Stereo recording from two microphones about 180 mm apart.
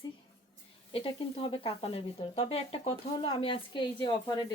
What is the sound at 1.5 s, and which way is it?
Speech, 30° left (ahead or behind).